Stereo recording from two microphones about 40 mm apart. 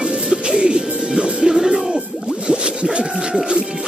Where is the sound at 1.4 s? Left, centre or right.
Centre.